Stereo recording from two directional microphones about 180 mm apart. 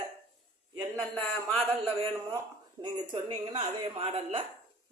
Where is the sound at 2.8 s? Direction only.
25° right (ahead or behind).